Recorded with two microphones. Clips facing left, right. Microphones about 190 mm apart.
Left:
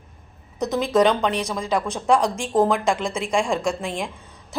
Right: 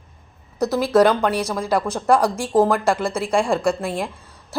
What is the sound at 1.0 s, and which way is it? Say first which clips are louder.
Speech: right 3 dB; 5° right (ahead or behind).